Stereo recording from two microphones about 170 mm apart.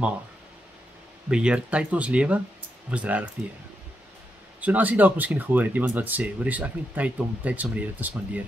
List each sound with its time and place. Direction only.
1.3 s speech: 5° right (ahead or behind)
4.6 s speech: 10° right (ahead or behind)